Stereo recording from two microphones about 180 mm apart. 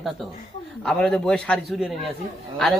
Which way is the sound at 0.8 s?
5° left (ahead or behind).